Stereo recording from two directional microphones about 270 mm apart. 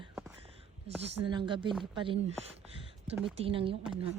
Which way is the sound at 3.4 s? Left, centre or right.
Centre.